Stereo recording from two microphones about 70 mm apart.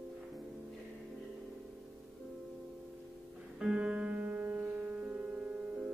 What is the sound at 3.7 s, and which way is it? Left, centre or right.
Music, centre.